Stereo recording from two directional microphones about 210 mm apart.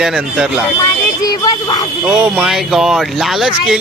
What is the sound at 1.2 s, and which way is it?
Speech, 15° left (ahead or behind).